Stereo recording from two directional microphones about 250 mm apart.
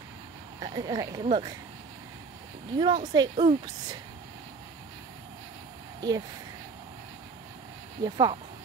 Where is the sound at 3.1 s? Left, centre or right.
Centre.